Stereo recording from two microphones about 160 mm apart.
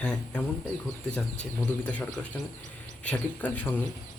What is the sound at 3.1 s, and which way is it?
Speech, 10° left (ahead or behind).